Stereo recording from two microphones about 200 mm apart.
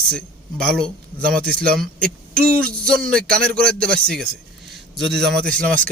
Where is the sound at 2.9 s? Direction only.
5° left (ahead or behind).